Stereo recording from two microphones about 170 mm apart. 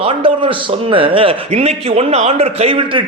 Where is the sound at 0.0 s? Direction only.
30° right (ahead or behind).